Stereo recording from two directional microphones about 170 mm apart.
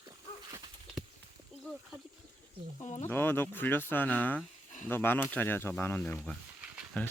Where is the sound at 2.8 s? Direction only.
45° left (ahead or behind).